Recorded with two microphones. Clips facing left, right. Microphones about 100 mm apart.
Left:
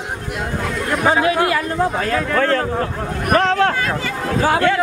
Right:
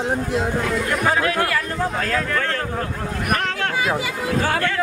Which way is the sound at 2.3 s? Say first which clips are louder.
Left 6 dB; 35° left (ahead or behind).